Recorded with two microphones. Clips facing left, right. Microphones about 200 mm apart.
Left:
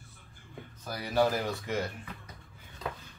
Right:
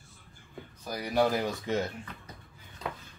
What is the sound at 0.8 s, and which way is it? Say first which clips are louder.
Speech: right 1 dB; 15° right (ahead or behind).